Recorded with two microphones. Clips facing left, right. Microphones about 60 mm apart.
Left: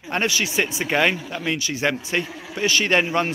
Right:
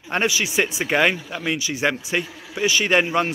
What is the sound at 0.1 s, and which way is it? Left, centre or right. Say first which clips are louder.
A man's voice: right 1 dB; centre.